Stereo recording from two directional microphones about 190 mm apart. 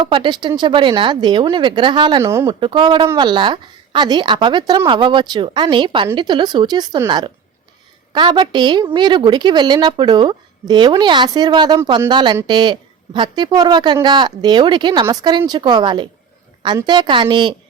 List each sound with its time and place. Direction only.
0.0 s a woman's voice: 25° right (ahead or behind)
2.6 s a woman's voice: 25° right (ahead or behind)